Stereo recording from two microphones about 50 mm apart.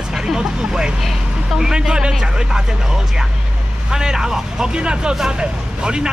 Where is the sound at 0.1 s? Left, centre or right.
Centre.